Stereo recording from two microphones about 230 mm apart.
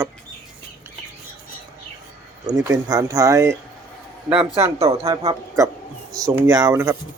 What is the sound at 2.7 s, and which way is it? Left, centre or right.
Speech, centre.